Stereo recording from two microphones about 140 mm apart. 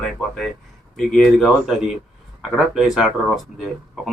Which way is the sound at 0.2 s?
Centre (ahead or behind).